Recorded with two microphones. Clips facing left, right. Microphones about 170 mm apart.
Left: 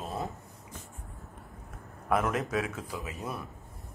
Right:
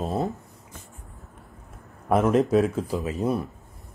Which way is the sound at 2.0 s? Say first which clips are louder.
Right 8 dB; 30° right (ahead or behind).